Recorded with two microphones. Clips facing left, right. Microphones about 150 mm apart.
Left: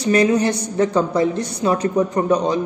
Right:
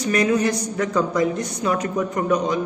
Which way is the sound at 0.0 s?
30° left (ahead or behind).